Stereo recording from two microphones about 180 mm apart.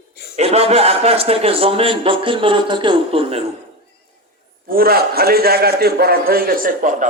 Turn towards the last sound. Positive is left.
turn(degrees=-50)  # may be behind; listen again after turning